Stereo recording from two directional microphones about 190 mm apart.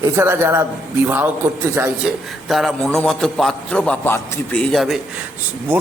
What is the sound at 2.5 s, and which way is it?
A man's voice, centre (ahead or behind).